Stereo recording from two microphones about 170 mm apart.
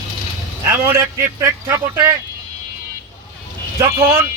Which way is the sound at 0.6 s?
15° right (ahead or behind).